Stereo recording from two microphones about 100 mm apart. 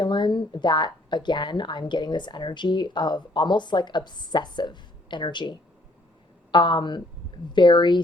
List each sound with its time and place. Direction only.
0.0 s a woman's voice: 50° left (ahead or behind)